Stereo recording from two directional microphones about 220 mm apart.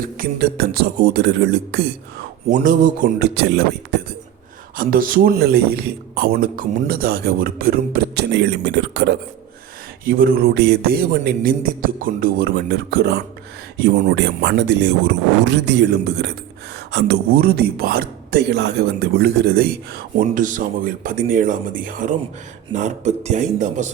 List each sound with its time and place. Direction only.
0.2 s speech: 45° right (ahead or behind)
2.5 s speech: 35° right (ahead or behind)
4.8 s speech: 40° right (ahead or behind)
10.1 s a man's voice: 40° right (ahead or behind)